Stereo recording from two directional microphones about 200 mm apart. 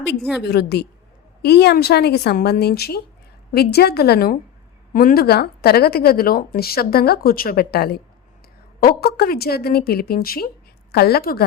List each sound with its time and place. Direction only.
0.4 s speech: 55° left (ahead or behind)